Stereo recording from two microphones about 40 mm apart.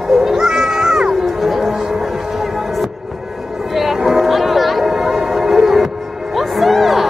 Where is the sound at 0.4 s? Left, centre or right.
Centre.